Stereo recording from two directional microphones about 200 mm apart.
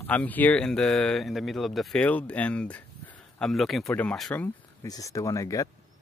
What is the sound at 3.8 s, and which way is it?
Speech, 10° left (ahead or behind).